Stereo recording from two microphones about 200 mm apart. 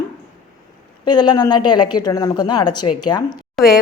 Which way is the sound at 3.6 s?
Centre (ahead or behind).